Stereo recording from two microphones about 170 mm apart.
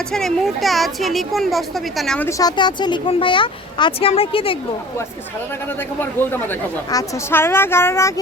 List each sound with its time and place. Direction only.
0.1 s speech: centre (ahead or behind)
2.4 s speech: 25° left (ahead or behind)
6.0 s a woman's voice: 10° left (ahead or behind)